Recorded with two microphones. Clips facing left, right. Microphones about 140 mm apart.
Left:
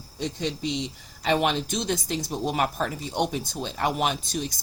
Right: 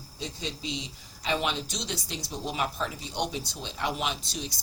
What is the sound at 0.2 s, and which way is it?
Speech, 55° left (ahead or behind).